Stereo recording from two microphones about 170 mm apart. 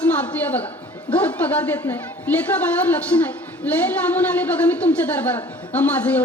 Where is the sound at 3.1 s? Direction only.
20° left (ahead or behind).